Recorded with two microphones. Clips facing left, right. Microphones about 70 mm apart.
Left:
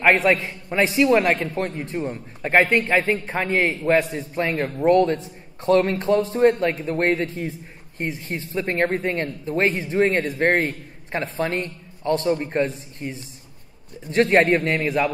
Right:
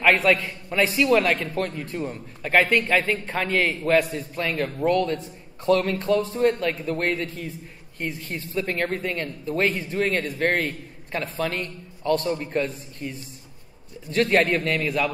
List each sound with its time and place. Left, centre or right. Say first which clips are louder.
0.0 s a man's voice: left 2 dB; left